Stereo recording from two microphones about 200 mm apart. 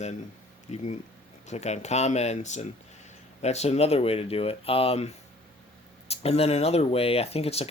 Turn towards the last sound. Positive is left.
turn(degrees=30)  # may be behind; listen again after turning